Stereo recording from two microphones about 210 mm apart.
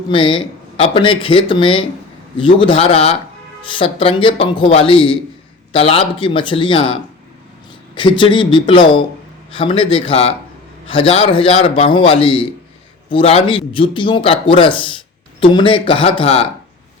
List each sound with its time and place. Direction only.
0.1 s speech: 25° left (ahead or behind)